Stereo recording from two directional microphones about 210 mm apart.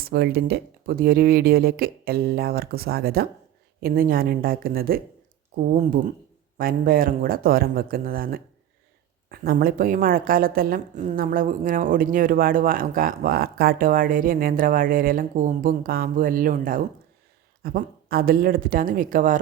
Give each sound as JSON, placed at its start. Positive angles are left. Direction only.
{"t": 0.0, "sound": "a woman's voice", "side_deg": -50}